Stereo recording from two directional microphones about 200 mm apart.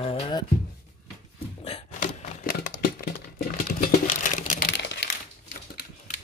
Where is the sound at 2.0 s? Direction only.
45° left (ahead or behind).